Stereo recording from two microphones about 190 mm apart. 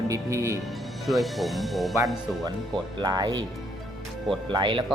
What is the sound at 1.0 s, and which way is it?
Speech, centre (ahead or behind).